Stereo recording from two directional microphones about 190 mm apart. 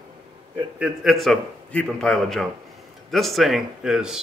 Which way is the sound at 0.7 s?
Centre (ahead or behind).